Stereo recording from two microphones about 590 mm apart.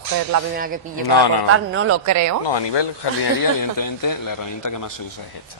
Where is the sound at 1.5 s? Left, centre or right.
Right.